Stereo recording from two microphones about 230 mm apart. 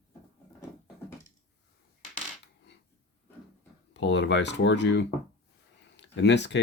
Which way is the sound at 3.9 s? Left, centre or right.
Left.